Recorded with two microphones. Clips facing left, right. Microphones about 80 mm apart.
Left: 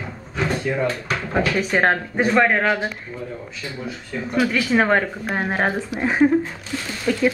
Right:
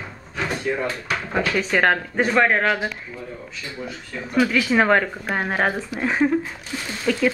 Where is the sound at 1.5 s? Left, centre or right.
Centre.